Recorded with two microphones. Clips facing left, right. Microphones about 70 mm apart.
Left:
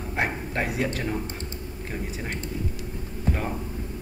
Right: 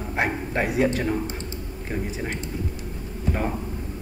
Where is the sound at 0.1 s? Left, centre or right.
Centre.